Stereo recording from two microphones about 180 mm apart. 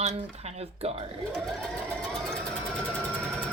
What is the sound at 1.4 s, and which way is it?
Vehicle, centre (ahead or behind).